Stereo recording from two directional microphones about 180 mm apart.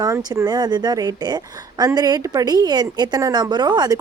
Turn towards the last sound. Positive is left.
turn(degrees=-20)  # may be behind; listen again after turning